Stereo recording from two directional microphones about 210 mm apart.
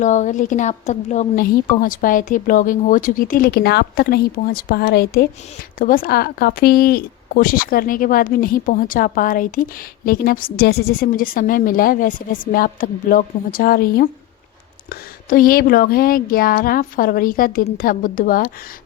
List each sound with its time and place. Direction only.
0.0 s a woman's voice: 35° left (ahead or behind)